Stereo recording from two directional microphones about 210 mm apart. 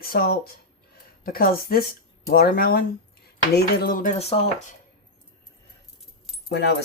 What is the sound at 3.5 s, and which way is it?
Cutlery, 45° left (ahead or behind).